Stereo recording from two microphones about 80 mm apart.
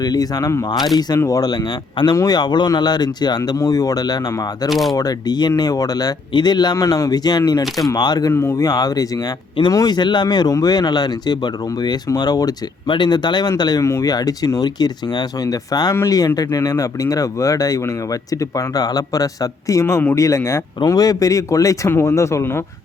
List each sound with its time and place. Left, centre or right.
0.0 s speech: left
0.6 s speech: left
1.2 s speech: left
3.6 s speech: left
4.7 s speech: centre
4.9 s speech: left
6.3 s speech: left
6.7 s speech: left
8.3 s speech: left
8.5 s speech: left
9.8 s speech: left
12.9 s speech: left
20.8 s speech: left
21.8 s speech: left